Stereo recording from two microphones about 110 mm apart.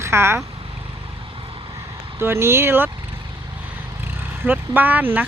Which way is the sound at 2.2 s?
25° right (ahead or behind).